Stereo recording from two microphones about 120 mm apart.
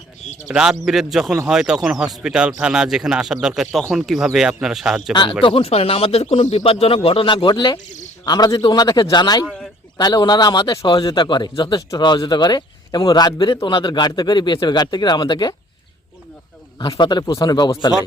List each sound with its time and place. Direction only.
0.4 s speech: 5° right (ahead or behind)
5.4 s a man's voice: 50° left (ahead or behind)
16.9 s a man's voice: 40° left (ahead or behind)